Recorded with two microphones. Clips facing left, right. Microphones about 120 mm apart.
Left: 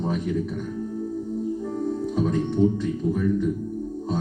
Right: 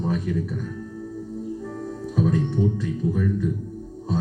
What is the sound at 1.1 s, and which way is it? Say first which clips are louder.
Music: left 2 dB; 20° left (ahead or behind).